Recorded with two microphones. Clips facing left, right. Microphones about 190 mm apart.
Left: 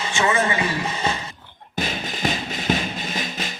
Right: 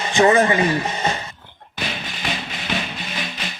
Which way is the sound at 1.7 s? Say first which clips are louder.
Left 2 dB; 45° left (ahead or behind).